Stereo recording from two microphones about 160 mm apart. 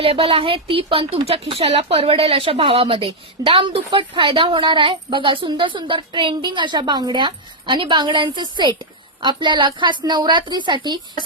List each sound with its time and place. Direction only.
0.0 s a woman's voice: 35° right (ahead or behind)